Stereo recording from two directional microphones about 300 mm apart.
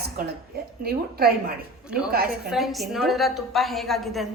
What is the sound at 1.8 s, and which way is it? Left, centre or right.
A woman's voice, centre.